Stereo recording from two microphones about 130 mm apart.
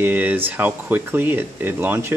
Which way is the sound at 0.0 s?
15° right (ahead or behind).